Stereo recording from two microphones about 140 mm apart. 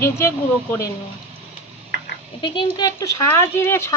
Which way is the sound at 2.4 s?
35° left (ahead or behind).